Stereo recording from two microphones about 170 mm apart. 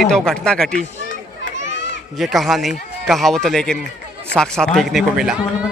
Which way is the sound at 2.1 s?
Centre (ahead or behind).